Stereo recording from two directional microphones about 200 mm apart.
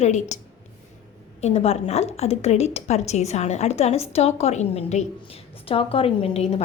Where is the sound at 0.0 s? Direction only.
35° left (ahead or behind).